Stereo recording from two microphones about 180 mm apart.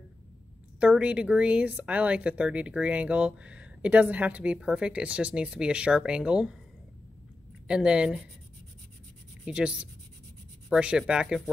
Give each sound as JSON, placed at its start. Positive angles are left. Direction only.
{"t": 0.7, "sound": "speech", "side_deg": -5}
{"t": 7.6, "sound": "speech", "side_deg": -5}
{"t": 9.4, "sound": "speech", "side_deg": -5}